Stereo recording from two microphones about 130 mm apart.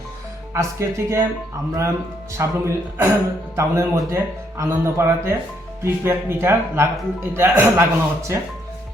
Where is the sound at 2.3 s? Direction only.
20° right (ahead or behind).